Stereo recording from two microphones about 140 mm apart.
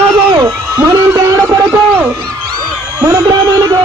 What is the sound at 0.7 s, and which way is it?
Music, 15° right (ahead or behind).